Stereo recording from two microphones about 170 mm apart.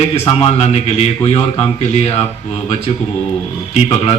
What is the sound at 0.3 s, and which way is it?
Speech, 35° left (ahead or behind).